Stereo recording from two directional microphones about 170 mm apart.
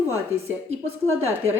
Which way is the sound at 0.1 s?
15° right (ahead or behind).